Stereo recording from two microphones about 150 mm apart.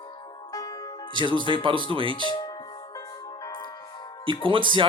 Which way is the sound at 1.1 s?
30° right (ahead or behind).